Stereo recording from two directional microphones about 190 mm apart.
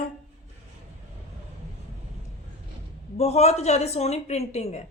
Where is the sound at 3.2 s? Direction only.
35° left (ahead or behind).